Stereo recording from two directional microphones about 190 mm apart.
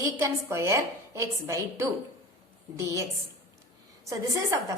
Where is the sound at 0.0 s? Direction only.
15° right (ahead or behind).